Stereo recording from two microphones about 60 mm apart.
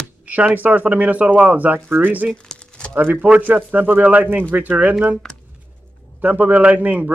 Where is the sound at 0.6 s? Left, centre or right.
Right.